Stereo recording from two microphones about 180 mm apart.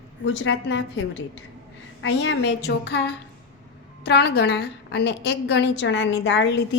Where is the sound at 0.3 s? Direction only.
90° left.